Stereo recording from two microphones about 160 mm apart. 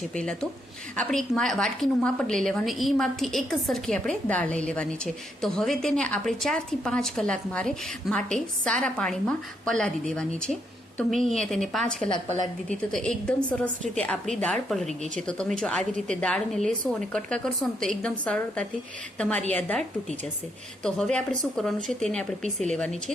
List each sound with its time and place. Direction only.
0.1 s a woman's voice: 5° left (ahead or behind)
20.8 s a woman's voice: 5° left (ahead or behind)